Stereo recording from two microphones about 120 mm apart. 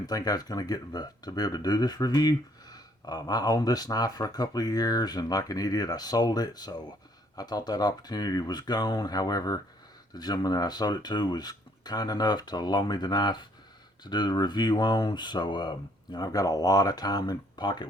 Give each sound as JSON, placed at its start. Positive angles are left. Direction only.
{"t": 0.0, "sound": "speech", "side_deg": 30}